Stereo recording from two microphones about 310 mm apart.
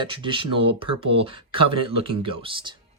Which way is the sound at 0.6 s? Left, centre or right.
Right.